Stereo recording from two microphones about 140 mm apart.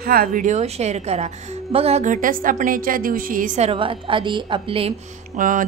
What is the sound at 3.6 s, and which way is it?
A woman's voice, 40° right (ahead or behind).